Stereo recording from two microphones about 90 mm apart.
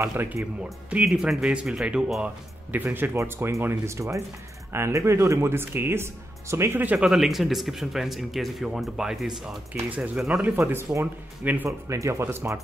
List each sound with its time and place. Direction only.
0.0 s speech: 25° right (ahead or behind)
0.8 s speech: 10° right (ahead or behind)
2.2 s speech: 20° right (ahead or behind)
7.0 s speech: 5° right (ahead or behind)
9.8 s speech: 15° right (ahead or behind)
10.4 s speech: 25° right (ahead or behind)